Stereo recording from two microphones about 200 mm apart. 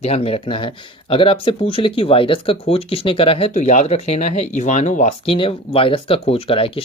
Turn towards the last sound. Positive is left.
turn(degrees=25)  # may be behind; listen again after turning